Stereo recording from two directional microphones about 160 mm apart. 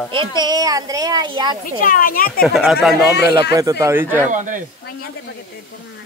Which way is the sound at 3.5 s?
20° right (ahead or behind).